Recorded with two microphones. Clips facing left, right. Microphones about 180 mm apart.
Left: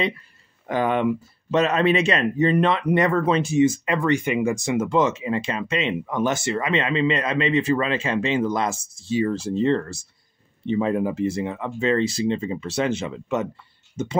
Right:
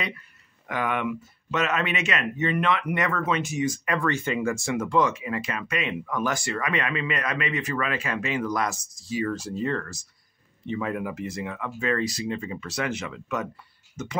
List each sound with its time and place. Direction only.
0.7 s speech: 30° left (ahead or behind)